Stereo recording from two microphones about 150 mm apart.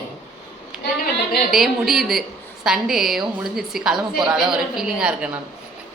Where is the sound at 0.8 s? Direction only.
90° left.